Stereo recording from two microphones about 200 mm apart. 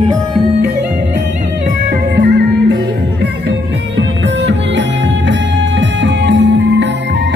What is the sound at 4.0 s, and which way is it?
Music, 65° right (ahead or behind).